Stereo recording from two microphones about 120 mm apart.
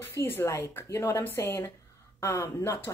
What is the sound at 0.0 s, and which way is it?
Speech, 20° left (ahead or behind).